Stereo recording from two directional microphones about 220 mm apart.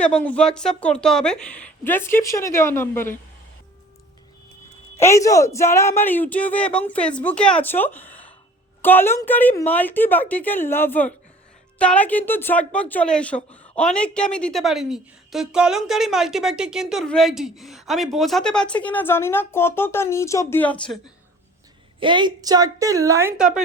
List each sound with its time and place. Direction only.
0.0 s speech: 5° left (ahead or behind)
4.9 s a woman's voice: 15° left (ahead or behind)
22.0 s a woman's voice: 20° right (ahead or behind)